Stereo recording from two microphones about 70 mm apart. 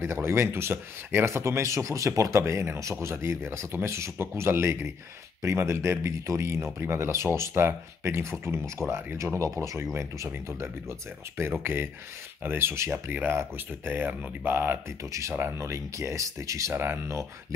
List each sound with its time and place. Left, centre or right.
0.0 s speech: right
15.6 s speech: right
16.7 s speech: right
17.1 s speech: right